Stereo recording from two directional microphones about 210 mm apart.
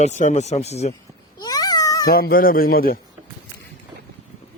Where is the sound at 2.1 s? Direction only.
45° left (ahead or behind).